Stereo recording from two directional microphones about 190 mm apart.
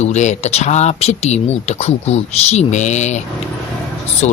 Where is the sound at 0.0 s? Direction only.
35° left (ahead or behind).